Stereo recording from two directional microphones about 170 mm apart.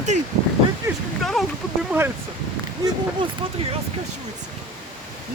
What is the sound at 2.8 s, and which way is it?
Speech, 20° right (ahead or behind).